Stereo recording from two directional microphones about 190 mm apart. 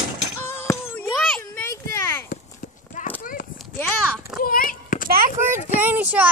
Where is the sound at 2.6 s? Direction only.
45° left (ahead or behind).